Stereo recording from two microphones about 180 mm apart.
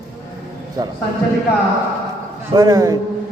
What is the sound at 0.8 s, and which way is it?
Speech, 20° right (ahead or behind).